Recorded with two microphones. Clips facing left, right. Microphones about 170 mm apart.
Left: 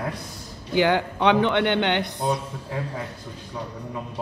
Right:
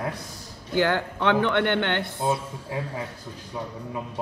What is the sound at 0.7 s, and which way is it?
Speech, 15° left (ahead or behind).